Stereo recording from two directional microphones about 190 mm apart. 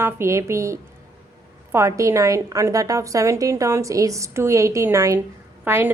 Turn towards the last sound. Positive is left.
turn(degrees=-15)  # may be behind; listen again after turning